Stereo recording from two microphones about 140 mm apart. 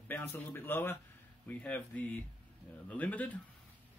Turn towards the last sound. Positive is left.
turn(degrees=10)  # may be behind; listen again after turning